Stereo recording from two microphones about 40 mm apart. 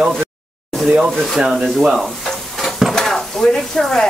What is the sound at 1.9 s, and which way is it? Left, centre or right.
Stir, centre.